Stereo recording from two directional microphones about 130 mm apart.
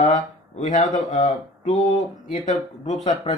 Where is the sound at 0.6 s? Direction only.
70° left (ahead or behind).